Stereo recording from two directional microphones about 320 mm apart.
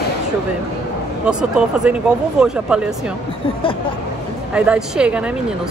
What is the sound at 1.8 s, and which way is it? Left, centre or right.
Speech, centre.